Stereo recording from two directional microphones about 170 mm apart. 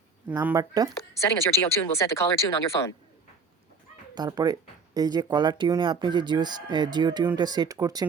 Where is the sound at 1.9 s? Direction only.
15° left (ahead or behind).